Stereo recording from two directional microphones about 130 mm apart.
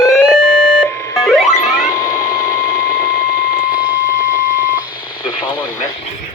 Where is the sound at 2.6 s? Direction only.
90° left.